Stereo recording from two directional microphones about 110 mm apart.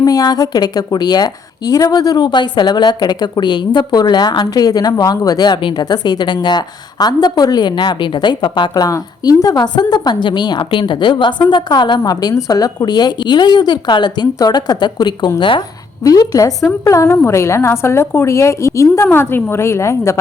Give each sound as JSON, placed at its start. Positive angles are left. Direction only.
{"t": 0.0, "sound": "a woman's voice", "side_deg": 35}
{"t": 16.0, "sound": "a woman's voice", "side_deg": 35}